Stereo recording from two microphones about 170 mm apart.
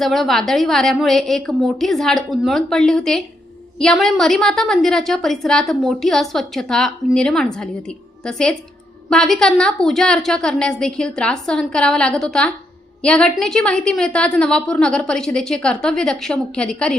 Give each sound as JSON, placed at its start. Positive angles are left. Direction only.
{"t": 0.0, "sound": "a woman's voice", "side_deg": 0}